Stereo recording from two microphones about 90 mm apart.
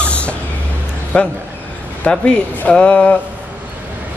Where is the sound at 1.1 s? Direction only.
15° left (ahead or behind).